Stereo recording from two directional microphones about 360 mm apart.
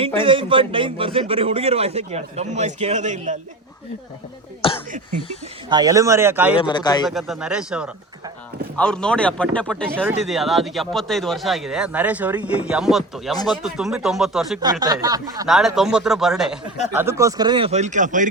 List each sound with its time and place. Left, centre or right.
0.0 s a man's voice: centre
5.6 s a man's voice: centre
6.6 s speech: centre
7.1 s a man's voice: centre; by 18.3 s right